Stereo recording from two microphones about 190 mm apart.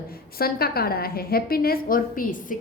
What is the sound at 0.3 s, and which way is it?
A woman's voice, 55° left (ahead or behind).